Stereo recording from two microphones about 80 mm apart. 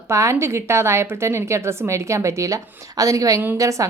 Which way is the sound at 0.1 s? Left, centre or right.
Right.